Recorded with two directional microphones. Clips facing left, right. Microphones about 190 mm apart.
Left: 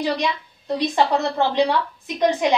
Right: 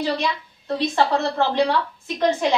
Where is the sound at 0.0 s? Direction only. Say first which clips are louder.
Left 1 dB; 15° left (ahead or behind).